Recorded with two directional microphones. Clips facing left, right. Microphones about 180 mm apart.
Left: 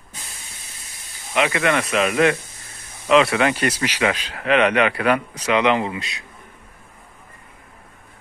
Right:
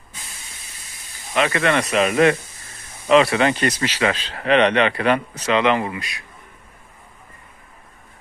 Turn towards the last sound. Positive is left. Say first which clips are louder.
# left 1 dB
turn(degrees=20)  # may be behind; listen again after turning